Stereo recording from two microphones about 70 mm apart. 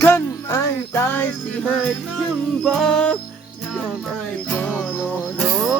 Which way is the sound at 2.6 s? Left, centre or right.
Centre.